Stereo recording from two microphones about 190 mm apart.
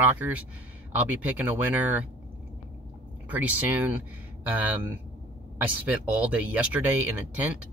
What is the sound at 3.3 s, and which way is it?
Speech, 10° right (ahead or behind).